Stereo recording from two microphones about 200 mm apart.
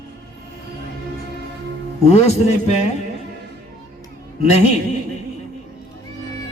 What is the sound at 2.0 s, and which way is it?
Speech, 35° left (ahead or behind).